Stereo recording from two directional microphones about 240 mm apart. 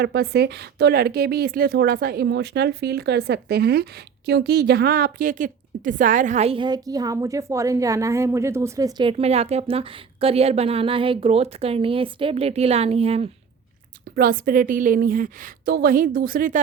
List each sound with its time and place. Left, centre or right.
0.0 s speech: right
14.2 s a woman's voice: right